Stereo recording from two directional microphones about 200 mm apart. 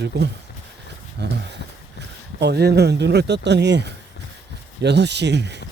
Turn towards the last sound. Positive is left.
turn(degrees=-60)  # may be behind; listen again after turning